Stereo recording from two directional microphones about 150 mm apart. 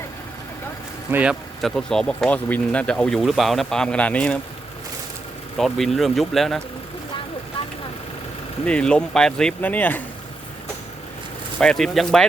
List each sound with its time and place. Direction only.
1.1 s speech: 5° right (ahead or behind)
5.5 s speech: centre (ahead or behind)
8.6 s speech: 5° left (ahead or behind)
11.6 s speech: 5° left (ahead or behind)